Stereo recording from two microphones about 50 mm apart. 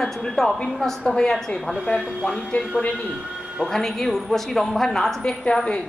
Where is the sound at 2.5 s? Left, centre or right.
Left.